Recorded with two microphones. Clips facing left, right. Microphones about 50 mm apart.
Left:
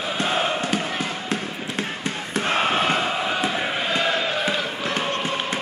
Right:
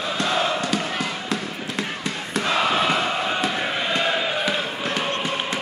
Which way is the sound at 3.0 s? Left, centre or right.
Centre.